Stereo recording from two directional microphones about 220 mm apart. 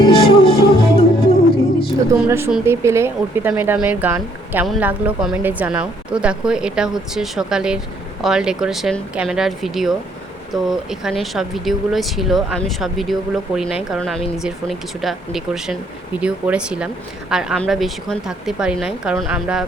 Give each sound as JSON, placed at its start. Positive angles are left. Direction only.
{"t": 0.0, "sound": "music", "side_deg": 25}
{"t": 2.1, "sound": "speech", "side_deg": -10}